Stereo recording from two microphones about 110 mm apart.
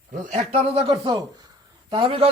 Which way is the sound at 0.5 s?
65° right (ahead or behind).